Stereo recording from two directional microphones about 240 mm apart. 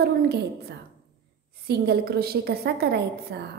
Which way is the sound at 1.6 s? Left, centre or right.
Right.